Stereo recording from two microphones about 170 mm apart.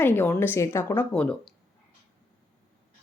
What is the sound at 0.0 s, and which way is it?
Speech, 10° left (ahead or behind).